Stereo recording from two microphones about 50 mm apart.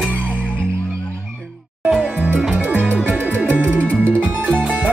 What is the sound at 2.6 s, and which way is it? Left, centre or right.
Music, right.